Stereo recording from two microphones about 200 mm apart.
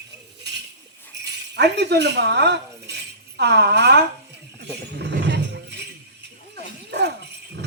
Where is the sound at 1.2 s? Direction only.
60° right (ahead or behind).